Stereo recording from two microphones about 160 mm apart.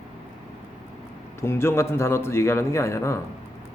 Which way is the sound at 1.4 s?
15° left (ahead or behind).